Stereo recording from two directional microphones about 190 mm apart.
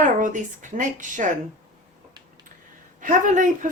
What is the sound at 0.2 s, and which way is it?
A woman's voice, 40° right (ahead or behind).